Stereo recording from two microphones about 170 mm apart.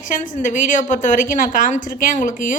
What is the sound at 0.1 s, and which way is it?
A woman's voice, 50° left (ahead or behind).